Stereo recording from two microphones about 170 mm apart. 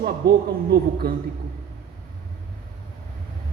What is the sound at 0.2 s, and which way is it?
Speech, 80° right.